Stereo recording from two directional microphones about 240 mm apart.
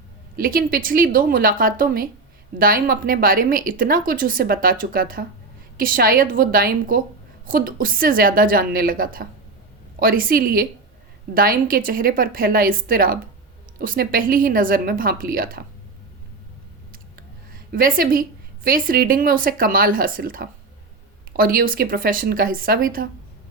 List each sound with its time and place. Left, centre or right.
0.3 s speech: right
16.9 s speech: right